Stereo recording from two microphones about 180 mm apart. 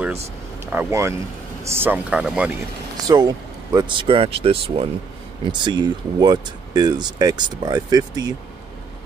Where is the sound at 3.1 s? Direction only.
20° right (ahead or behind).